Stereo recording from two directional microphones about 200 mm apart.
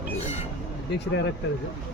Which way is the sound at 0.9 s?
65° left (ahead or behind).